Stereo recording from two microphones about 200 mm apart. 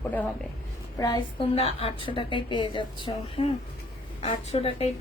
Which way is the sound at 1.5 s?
30° left (ahead or behind).